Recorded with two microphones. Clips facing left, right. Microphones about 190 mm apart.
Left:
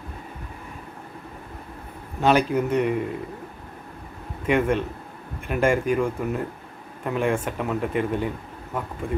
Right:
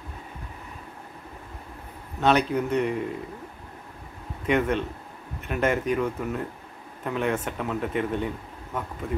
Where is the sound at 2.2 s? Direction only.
5° left (ahead or behind).